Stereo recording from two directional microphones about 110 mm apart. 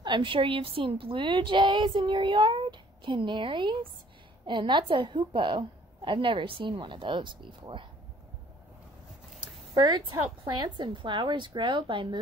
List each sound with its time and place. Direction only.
0.0 s a woman's voice: 50° right (ahead or behind)
9.8 s a woman's voice: 40° right (ahead or behind)